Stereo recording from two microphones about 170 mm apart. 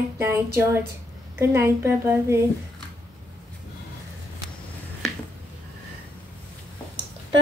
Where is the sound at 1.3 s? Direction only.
15° right (ahead or behind).